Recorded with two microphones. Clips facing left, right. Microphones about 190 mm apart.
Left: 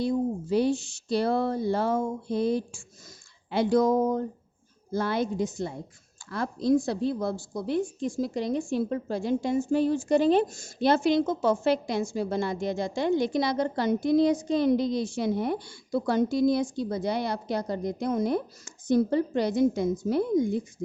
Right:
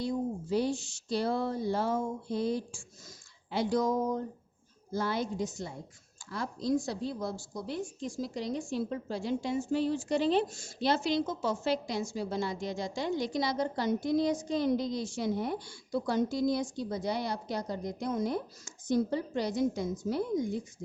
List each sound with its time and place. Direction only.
0.5 s a woman's voice: 65° left (ahead or behind)